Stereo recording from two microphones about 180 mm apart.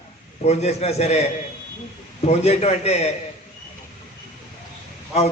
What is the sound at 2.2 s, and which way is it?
Speech, 35° left (ahead or behind).